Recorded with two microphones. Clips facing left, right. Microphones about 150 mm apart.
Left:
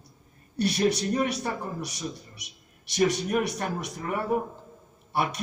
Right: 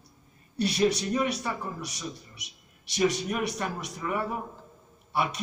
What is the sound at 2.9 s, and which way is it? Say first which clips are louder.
Speech: left 2 dB; 55° left (ahead or behind).